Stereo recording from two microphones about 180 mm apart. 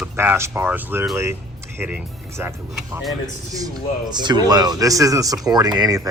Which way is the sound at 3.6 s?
20° right (ahead or behind).